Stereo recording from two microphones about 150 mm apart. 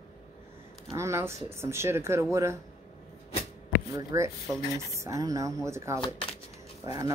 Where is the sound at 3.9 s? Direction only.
20° right (ahead or behind).